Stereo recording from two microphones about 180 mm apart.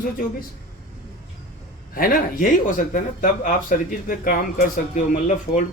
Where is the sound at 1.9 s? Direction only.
50° left (ahead or behind).